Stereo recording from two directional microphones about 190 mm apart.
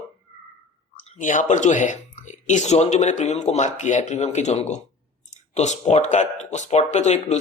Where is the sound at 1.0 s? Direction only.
40° left (ahead or behind).